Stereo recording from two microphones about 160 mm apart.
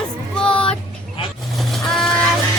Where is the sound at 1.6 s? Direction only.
Centre (ahead or behind).